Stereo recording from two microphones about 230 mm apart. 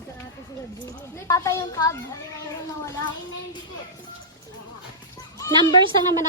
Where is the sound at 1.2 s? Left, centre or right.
Centre.